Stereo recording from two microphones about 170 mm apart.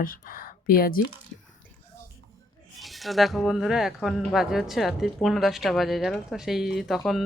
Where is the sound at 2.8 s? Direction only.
Centre (ahead or behind).